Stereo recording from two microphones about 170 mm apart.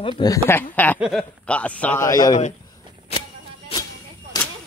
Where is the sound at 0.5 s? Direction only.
10° left (ahead or behind).